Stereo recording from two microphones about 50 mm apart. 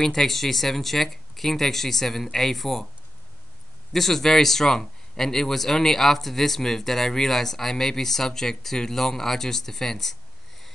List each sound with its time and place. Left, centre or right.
0.0 s speech: centre
3.9 s a man's voice: centre